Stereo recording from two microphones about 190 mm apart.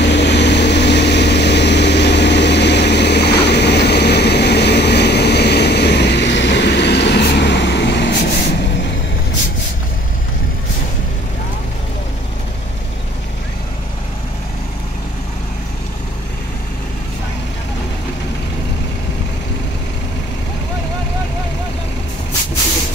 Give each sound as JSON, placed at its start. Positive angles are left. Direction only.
{"t": 0.0, "sound": "vehicle", "side_deg": 65}